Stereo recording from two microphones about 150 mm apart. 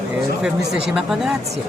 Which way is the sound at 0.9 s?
5° right (ahead or behind).